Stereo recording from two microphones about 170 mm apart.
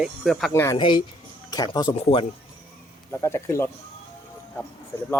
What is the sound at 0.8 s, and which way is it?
Speech, 30° left (ahead or behind).